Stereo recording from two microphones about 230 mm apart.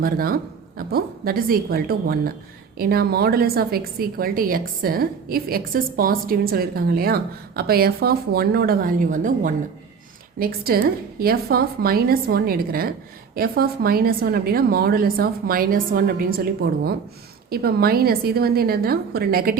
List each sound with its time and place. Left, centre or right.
0.0 s a woman's voice: right